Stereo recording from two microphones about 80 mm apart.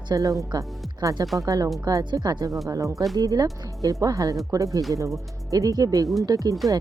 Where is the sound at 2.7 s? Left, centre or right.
Right.